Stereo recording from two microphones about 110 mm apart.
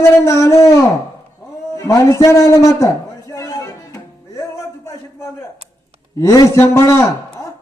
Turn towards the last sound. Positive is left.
turn(degrees=25)  # may be behind; listen again after turning